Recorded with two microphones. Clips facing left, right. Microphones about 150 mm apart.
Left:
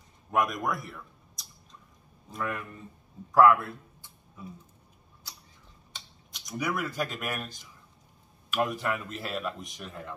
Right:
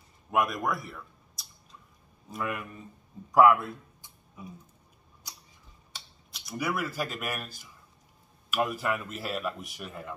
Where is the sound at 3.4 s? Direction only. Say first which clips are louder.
Even; 15° right (ahead or behind).